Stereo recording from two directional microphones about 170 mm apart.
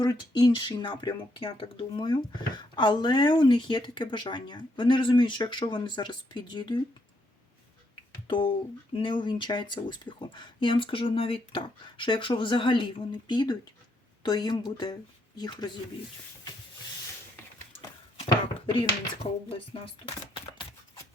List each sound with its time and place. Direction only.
0.0 s speech: 25° left (ahead or behind)
9.0 s speech: 30° left (ahead or behind)
18.2 s speech: 30° left (ahead or behind)